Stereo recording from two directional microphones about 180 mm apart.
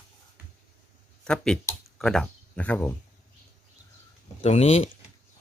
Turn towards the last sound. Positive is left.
turn(degrees=35)  # may be behind; listen again after turning